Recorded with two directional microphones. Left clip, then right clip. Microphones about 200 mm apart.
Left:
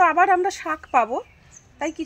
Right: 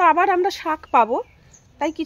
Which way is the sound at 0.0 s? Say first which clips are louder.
Right 1 dB; 45° right (ahead or behind).